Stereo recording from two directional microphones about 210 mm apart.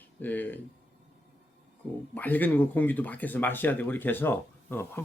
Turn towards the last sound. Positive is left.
turn(degrees=10)  # may be behind; listen again after turning